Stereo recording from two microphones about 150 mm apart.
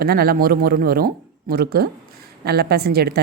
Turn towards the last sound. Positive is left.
turn(degrees=-90)